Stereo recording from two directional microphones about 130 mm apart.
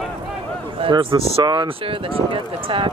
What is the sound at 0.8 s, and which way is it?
Speech, 40° right (ahead or behind).